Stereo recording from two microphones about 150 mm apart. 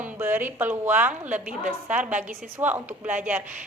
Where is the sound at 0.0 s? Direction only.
15° right (ahead or behind).